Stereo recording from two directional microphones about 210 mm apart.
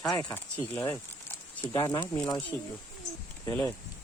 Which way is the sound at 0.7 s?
15° left (ahead or behind).